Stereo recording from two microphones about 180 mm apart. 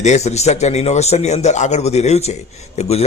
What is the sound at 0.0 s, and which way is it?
A man's voice, 40° left (ahead or behind).